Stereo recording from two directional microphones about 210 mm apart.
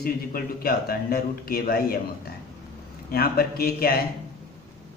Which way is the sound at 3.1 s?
45° left (ahead or behind).